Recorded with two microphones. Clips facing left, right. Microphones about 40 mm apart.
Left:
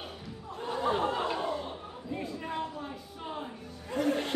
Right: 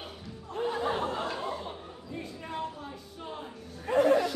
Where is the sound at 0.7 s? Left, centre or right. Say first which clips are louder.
Left 1 dB; centre.